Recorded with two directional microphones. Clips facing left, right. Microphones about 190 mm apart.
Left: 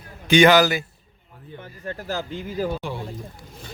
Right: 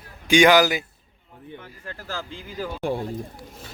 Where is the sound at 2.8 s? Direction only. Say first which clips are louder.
Right 5 dB; 50° right (ahead or behind).